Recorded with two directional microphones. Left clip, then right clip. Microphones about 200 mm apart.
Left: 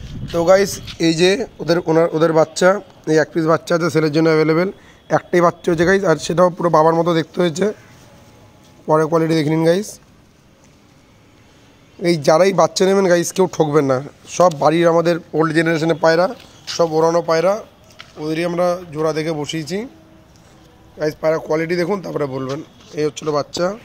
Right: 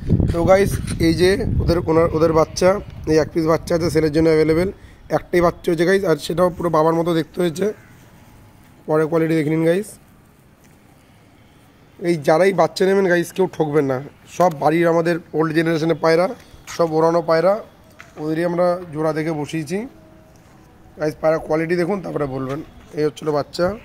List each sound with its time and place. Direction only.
0.3 s speech: 10° left (ahead or behind); by 7.7 s 30° left (ahead or behind)
8.8 s speech: 35° left (ahead or behind)
12.0 s speech: 50° left (ahead or behind); by 16.8 s 15° left (ahead or behind)
16.8 s speech: centre (ahead or behind)
21.0 s speech: 5° left (ahead or behind)